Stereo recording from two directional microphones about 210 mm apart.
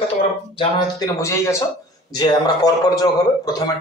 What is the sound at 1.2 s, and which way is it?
A man's voice, 15° left (ahead or behind).